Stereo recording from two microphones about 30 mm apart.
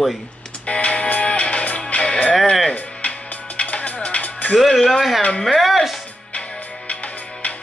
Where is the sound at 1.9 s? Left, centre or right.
Left.